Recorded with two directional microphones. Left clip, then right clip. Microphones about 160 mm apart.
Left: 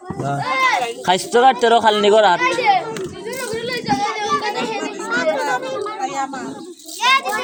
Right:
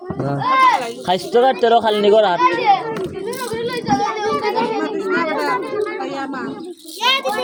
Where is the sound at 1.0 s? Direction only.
90° left.